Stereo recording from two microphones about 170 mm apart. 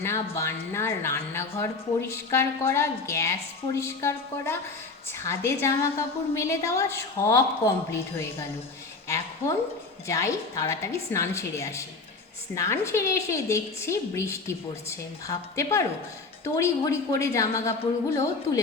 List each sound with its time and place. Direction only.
0.0 s a woman's voice: 15° left (ahead or behind)
10.1 s a woman's voice: 20° left (ahead or behind)